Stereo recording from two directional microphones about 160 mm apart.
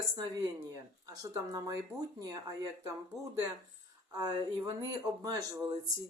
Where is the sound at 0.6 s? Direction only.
20° right (ahead or behind).